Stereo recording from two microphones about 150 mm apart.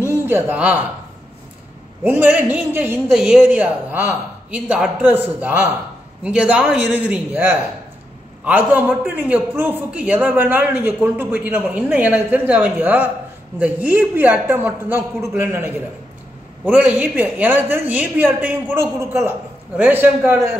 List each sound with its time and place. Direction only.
0.0 s speech: 15° right (ahead or behind)
2.0 s a man's voice: 10° right (ahead or behind)